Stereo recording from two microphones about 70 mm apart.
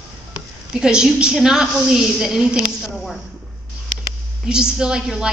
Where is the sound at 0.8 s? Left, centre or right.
Centre.